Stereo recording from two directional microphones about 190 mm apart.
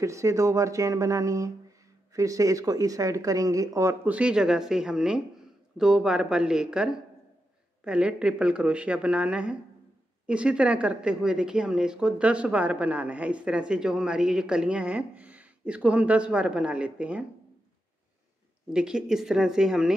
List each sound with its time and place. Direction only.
0.0 s a woman's voice: 15° right (ahead or behind)
18.7 s a woman's voice: 5° right (ahead or behind)